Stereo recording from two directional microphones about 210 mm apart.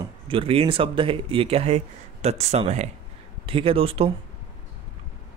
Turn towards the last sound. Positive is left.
turn(degrees=-25)  # may be behind; listen again after turning